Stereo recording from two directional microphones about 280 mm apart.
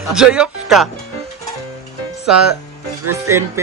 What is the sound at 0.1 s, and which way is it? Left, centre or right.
Speech, centre.